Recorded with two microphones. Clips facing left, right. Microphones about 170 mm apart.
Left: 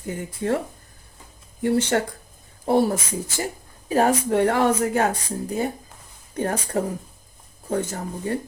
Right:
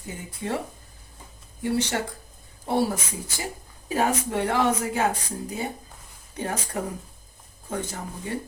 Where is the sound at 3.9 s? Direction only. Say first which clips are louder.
Left 5 dB; 45° left (ahead or behind).